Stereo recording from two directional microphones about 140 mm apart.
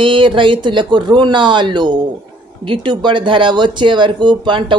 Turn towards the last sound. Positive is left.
turn(degrees=-35)  # may be behind; listen again after turning